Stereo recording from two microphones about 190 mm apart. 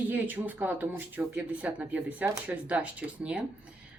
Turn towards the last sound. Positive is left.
turn(degrees=-5)  # may be behind; listen again after turning